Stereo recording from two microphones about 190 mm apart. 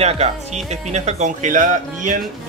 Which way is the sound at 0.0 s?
35° right (ahead or behind).